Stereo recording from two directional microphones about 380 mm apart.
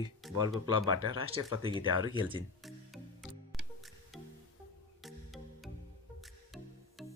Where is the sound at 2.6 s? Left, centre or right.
Centre.